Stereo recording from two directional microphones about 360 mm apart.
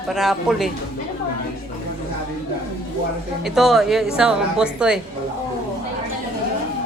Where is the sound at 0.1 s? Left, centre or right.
Centre.